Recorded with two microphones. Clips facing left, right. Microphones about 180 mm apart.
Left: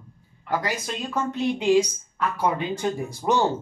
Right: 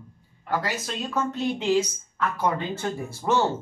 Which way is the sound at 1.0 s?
15° left (ahead or behind).